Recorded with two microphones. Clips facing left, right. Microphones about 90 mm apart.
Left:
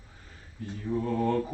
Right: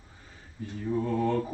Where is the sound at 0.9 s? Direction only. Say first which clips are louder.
Even; 10° right (ahead or behind).